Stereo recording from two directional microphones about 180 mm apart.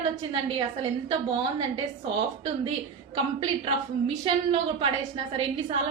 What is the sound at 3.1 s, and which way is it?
A woman's voice, 30° right (ahead or behind).